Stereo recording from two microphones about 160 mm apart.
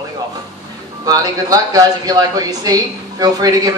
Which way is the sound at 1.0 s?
25° right (ahead or behind).